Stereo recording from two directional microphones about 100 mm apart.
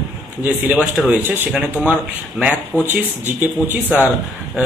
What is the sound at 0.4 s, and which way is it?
Speech, 15° right (ahead or behind).